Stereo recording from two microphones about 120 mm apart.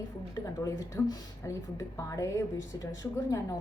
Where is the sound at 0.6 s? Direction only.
30° left (ahead or behind).